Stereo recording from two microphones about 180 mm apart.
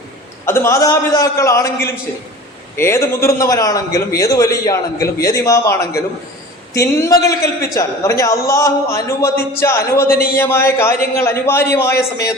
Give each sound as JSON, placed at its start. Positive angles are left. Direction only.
{"t": 0.4, "sound": "a man's voice", "side_deg": 15}